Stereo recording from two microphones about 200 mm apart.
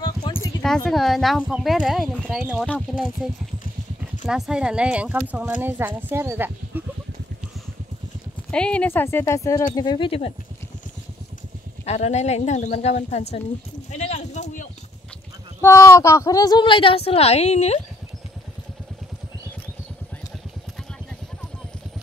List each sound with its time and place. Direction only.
0.0 s a sound: 20° left (ahead or behind)
0.6 s speech: 5° left (ahead or behind)
4.3 s speech: 5° right (ahead or behind)
8.5 s a woman's voice: 5° left (ahead or behind); by 10.3 s 25° left (ahead or behind)
11.8 s speech: 35° left (ahead or behind)
13.8 s a sound: 35° left (ahead or behind)
15.6 s a woman's voice: 15° left (ahead or behind); by 17.7 s 35° left (ahead or behind)